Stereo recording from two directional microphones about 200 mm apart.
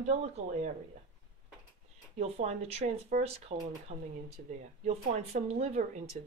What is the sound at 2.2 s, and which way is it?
Speech, 30° right (ahead or behind).